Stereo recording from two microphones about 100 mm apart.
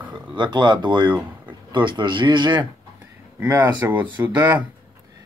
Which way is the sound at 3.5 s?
20° right (ahead or behind).